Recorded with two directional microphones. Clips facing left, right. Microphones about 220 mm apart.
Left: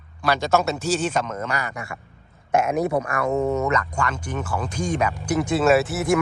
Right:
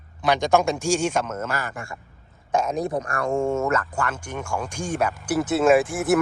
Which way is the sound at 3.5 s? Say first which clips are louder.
Left 1 dB; centre (ahead or behind).